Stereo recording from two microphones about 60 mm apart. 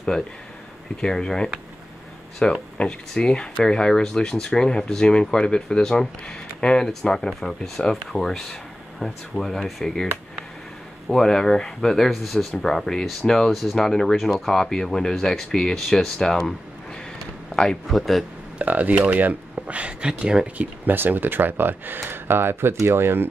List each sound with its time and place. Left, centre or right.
1.0 s speech: centre
17.8 s speech: centre
18.6 s speech: right
20.5 s speech: right